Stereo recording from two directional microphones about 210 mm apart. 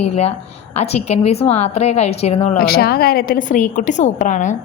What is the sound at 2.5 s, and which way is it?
A woman's voice, 45° left (ahead or behind).